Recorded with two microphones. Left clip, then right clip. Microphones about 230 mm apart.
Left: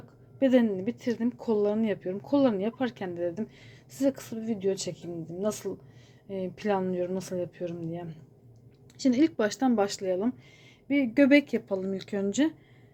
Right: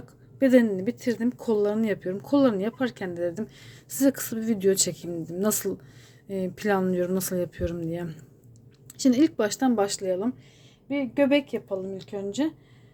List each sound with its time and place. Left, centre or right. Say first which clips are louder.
0.3 s a woman's voice: right 4 dB; centre
9.0 s a woman's voice: right 3 dB; centre
10.8 s speech: even; centre